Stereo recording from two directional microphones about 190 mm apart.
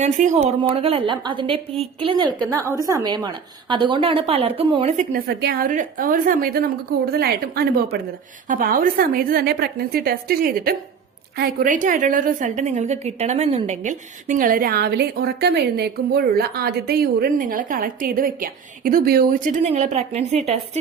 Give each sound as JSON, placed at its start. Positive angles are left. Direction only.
{"t": 0.0, "sound": "speech", "side_deg": -40}
{"t": 0.6, "sound": "a woman's voice", "side_deg": -30}
{"t": 2.6, "sound": "a woman's voice", "side_deg": -15}
{"t": 5.1, "sound": "a woman's voice", "side_deg": -55}
{"t": 19.6, "sound": "speech", "side_deg": -35}